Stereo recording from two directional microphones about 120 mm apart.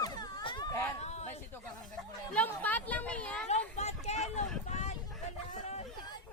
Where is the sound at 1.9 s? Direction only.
10° left (ahead or behind).